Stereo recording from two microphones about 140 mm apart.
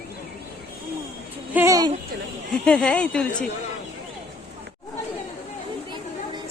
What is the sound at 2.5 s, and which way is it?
Speech, 5° left (ahead or behind).